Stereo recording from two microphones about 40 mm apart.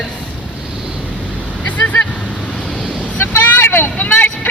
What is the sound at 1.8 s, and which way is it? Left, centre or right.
Vehicle, left.